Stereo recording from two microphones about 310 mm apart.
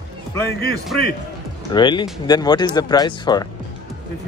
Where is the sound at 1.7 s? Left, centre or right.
Centre.